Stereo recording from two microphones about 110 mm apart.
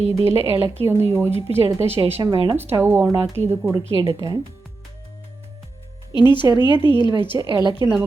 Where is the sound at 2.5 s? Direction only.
20° right (ahead or behind).